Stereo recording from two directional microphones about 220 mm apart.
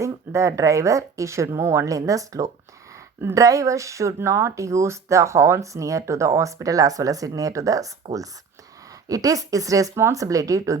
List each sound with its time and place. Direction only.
0.0 s speech: 15° right (ahead or behind)
9.0 s speech: 15° right (ahead or behind)